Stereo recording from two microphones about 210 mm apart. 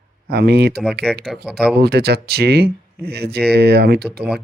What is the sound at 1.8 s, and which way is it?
Speech, 50° right (ahead or behind).